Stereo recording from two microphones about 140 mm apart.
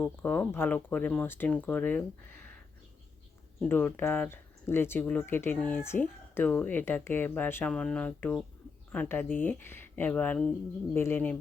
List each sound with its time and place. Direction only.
0.0 s speech: 10° left (ahead or behind)
3.7 s speech: 15° left (ahead or behind)